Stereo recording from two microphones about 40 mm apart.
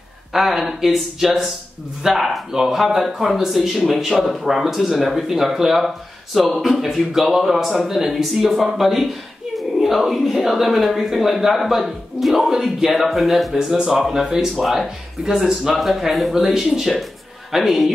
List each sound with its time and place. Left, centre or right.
0.3 s speech: centre
13.6 s speech: centre